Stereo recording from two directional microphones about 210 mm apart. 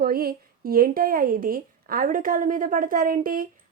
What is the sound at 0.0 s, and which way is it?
A woman's voice, 45° right (ahead or behind).